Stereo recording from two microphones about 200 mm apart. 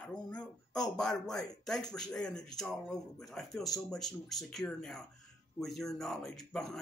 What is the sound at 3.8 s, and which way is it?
Speech, centre (ahead or behind).